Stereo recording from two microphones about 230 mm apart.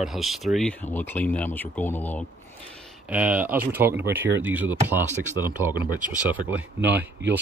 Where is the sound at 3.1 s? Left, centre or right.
Centre.